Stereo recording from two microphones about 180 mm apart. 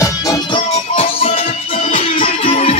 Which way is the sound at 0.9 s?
35° left (ahead or behind).